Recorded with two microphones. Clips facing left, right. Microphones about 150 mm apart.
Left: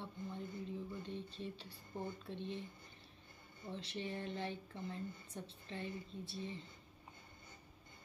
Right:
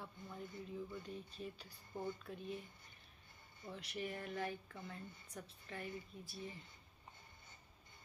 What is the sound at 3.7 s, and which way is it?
Speech, 30° left (ahead or behind).